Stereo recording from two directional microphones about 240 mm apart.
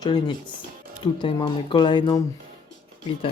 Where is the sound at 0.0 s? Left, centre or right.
Centre.